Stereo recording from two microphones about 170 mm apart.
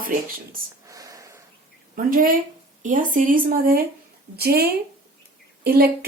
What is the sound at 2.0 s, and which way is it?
Speech, 55° right (ahead or behind).